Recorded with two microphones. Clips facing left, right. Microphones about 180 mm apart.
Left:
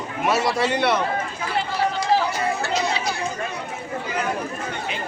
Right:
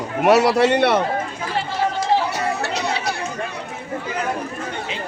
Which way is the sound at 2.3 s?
70° right (ahead or behind).